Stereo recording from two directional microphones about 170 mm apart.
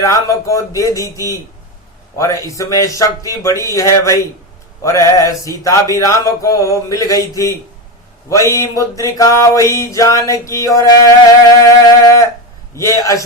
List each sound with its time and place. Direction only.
0.0 s music: 20° left (ahead or behind)
2.1 s music: 20° left (ahead or behind)
3.7 s a man's voice: 15° left (ahead or behind)
4.8 s music: 20° left (ahead or behind)
12.7 s a man's voice: 15° left (ahead or behind)